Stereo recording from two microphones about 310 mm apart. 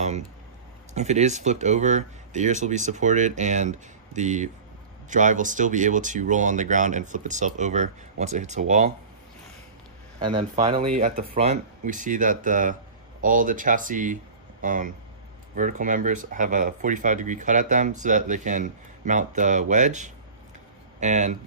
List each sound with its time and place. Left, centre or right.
0.9 s speech: right
10.2 s speech: centre